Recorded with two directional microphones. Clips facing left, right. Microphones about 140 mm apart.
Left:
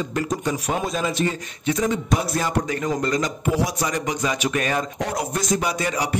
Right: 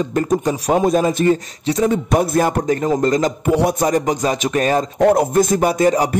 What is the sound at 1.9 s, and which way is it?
Speech, 50° right (ahead or behind).